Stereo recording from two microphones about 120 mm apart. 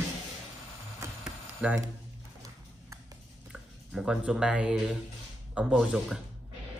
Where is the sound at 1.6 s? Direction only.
10° right (ahead or behind).